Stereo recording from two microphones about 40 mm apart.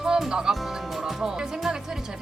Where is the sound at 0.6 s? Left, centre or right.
Centre.